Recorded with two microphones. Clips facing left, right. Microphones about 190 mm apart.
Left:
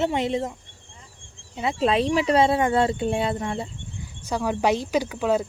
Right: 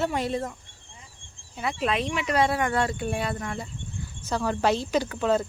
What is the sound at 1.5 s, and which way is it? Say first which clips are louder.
Speech: left 5 dB; 25° left (ahead or behind).